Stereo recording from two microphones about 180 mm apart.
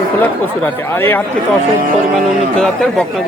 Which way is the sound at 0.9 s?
15° left (ahead or behind).